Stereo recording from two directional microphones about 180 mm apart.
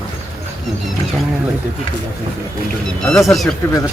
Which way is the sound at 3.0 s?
Centre (ahead or behind).